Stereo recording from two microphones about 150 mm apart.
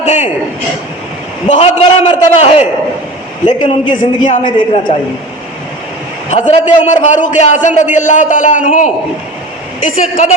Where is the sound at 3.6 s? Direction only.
30° left (ahead or behind).